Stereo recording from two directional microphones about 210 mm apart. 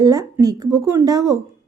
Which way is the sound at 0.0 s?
15° right (ahead or behind).